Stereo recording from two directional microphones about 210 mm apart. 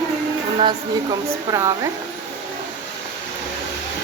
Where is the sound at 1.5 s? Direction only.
15° right (ahead or behind).